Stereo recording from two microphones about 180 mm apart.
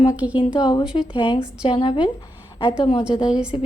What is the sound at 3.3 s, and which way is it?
Speech, 5° right (ahead or behind).